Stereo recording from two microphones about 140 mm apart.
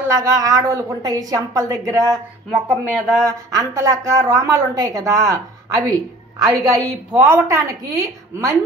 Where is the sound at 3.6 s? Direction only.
20° right (ahead or behind).